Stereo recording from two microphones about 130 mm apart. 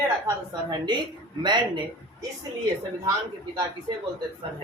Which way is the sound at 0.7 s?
35° right (ahead or behind).